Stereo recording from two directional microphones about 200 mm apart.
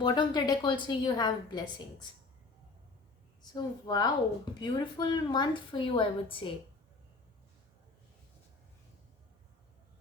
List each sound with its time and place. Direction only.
0.0 s a woman's voice: 20° left (ahead or behind)
3.5 s a woman's voice: 20° left (ahead or behind)